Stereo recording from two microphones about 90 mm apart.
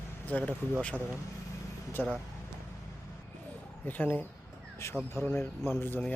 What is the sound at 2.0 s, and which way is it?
Speech, 20° left (ahead or behind).